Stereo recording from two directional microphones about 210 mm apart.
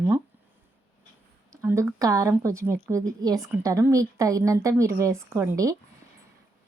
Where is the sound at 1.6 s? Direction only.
15° right (ahead or behind).